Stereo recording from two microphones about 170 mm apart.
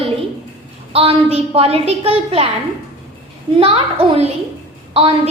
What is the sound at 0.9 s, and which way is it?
Child singing, 35° right (ahead or behind).